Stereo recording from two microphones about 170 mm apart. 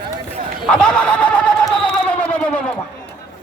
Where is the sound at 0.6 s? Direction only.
5° left (ahead or behind).